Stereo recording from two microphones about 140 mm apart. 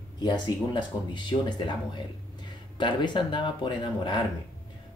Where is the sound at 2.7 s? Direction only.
35° left (ahead or behind).